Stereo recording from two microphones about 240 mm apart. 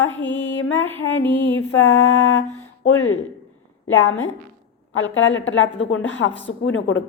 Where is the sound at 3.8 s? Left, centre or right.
Left.